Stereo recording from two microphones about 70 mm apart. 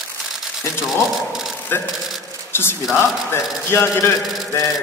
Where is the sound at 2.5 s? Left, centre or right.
Left.